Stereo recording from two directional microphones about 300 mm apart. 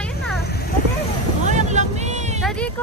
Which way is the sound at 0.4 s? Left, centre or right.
Left.